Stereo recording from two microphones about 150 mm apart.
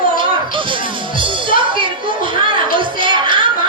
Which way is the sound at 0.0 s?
35° right (ahead or behind).